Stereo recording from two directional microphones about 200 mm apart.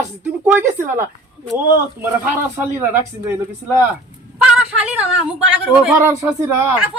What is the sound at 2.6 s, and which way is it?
Speech, 10° right (ahead or behind).